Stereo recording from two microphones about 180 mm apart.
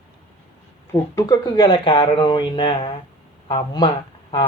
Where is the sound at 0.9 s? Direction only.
20° left (ahead or behind).